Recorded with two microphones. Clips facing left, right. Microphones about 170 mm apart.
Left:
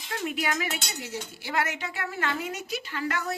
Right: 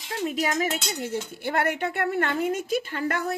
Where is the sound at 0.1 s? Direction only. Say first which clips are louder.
Right 3 dB; 35° right (ahead or behind).